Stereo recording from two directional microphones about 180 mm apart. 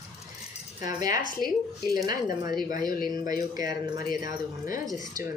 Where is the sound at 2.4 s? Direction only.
20° right (ahead or behind).